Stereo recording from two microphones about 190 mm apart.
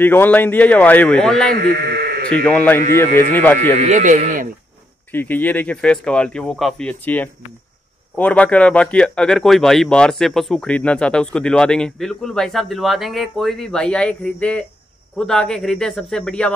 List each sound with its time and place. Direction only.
0.0 s speech: 10° left (ahead or behind)
3.7 s speech: 35° right (ahead or behind)
5.1 s speech: 10° left (ahead or behind)